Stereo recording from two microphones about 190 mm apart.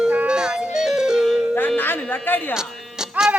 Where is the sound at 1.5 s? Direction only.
10° left (ahead or behind).